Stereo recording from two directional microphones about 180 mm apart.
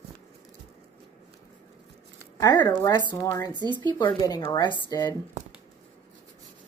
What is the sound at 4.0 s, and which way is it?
Speech, 20° left (ahead or behind).